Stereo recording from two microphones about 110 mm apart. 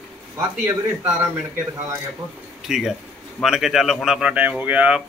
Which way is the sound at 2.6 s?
5° right (ahead or behind).